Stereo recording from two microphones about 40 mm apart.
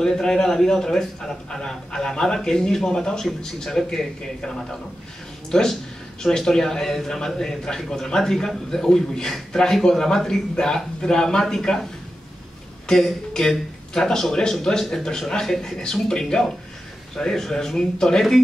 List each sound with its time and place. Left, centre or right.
0.0 s a man's voice: centre